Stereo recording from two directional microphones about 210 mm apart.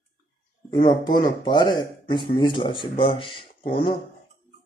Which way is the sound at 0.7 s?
20° left (ahead or behind).